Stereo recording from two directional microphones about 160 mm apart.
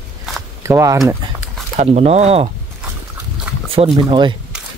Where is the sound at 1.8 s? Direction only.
40° right (ahead or behind).